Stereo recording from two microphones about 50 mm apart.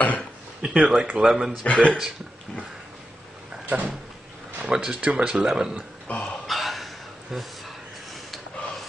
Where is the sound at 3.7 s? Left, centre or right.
Right.